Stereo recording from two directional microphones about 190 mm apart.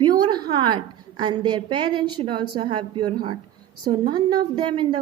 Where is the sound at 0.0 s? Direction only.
20° right (ahead or behind).